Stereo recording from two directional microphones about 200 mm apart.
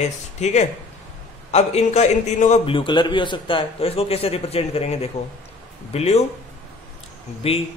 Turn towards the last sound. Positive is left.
turn(degrees=30)  # may be behind; listen again after turning